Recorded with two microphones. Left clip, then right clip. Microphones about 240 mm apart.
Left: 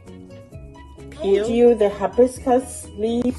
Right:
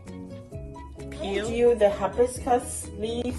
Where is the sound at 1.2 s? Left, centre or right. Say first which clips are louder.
Left 10 dB; left.